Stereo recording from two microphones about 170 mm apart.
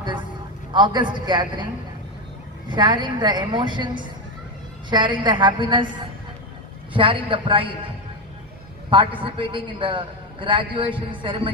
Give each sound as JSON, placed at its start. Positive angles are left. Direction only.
{"t": 0.7, "sound": "a man's voice", "side_deg": -25}
{"t": 2.7, "sound": "a man's voice", "side_deg": -25}
{"t": 6.9, "sound": "a man's voice", "side_deg": -30}
{"t": 8.9, "sound": "a man's voice", "side_deg": -30}